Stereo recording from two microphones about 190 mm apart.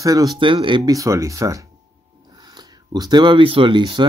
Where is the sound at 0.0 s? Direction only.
20° right (ahead or behind).